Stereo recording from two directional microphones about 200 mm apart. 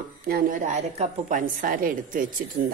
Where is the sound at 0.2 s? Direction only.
45° right (ahead or behind).